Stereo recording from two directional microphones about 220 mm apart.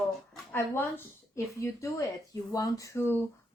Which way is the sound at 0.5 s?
10° left (ahead or behind).